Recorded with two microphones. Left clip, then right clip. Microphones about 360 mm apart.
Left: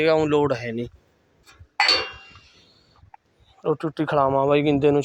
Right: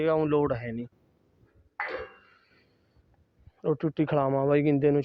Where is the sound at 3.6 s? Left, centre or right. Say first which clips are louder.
Left 3 dB; right.